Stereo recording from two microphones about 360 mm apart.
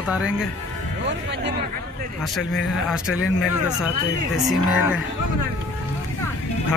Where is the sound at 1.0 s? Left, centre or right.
Right.